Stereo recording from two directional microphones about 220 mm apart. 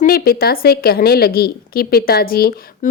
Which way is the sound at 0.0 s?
40° left (ahead or behind).